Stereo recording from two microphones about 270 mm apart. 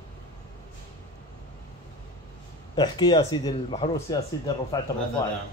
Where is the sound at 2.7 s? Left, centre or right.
Centre.